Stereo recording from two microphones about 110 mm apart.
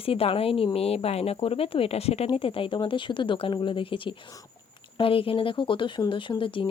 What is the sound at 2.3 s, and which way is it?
Speech, 55° left (ahead or behind).